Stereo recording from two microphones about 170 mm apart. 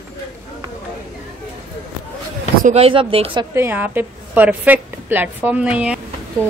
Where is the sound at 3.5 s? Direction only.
10° right (ahead or behind).